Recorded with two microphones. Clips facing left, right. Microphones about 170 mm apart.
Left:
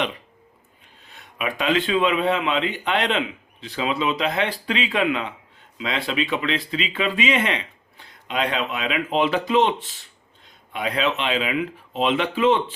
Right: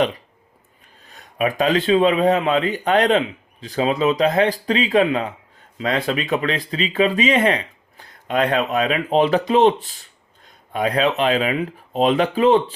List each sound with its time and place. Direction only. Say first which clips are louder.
1.0 s a man's voice: right 7 dB; 40° right (ahead or behind)